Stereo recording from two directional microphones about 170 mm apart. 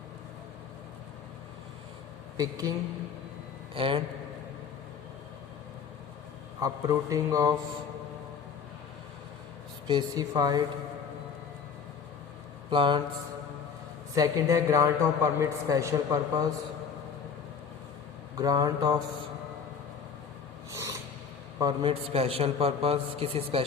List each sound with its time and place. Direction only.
2.4 s speech: 20° right (ahead or behind)
3.8 s speech: 30° right (ahead or behind)
6.6 s speech: 20° right (ahead or behind)
9.8 s speech: 25° right (ahead or behind)
12.7 s speech: 30° right (ahead or behind)
14.1 s speech: 20° right (ahead or behind)
18.3 s speech: 20° right (ahead or behind)
20.7 s a sound: 20° right (ahead or behind)
21.6 s a man's voice: 25° right (ahead or behind)